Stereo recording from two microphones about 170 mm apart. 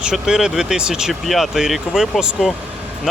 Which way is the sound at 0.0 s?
5° right (ahead or behind).